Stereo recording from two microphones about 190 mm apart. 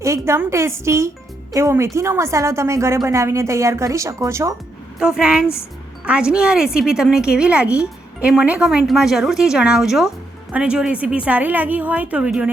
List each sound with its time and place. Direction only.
0.0 s a woman's voice: 15° right (ahead or behind)
4.9 s a woman's voice: 5° right (ahead or behind)